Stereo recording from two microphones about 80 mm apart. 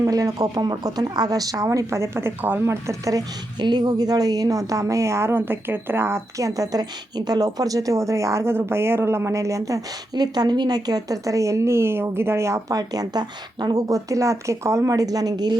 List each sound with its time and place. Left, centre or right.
0.0 s a woman's voice: right
2.8 s a woman's voice: right
3.6 s a woman's voice: right
12.7 s a woman's voice: right